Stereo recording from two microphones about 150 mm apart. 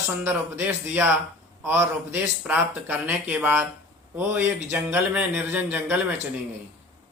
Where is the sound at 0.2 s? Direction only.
15° right (ahead or behind).